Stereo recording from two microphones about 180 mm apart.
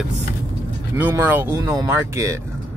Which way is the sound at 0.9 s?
10° right (ahead or behind).